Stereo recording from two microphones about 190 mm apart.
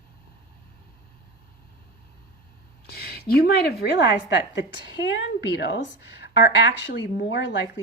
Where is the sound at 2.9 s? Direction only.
55° left (ahead or behind).